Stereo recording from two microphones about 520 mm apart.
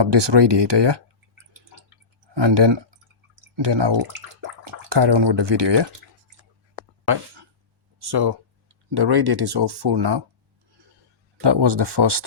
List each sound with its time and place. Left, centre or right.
0.0 s speech: right
2.3 s speech: right
6.7 s a sound: right
7.9 s speech: right
11.3 s speech: right